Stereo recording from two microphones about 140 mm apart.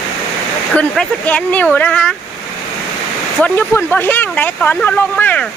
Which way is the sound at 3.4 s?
15° left (ahead or behind).